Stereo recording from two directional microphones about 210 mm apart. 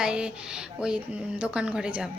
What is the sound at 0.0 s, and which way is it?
Speech, 5° right (ahead or behind).